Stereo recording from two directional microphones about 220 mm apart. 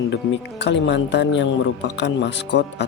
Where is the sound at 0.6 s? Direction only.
55° left (ahead or behind).